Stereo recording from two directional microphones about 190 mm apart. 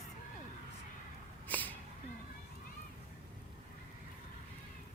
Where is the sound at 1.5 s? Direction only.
10° left (ahead or behind).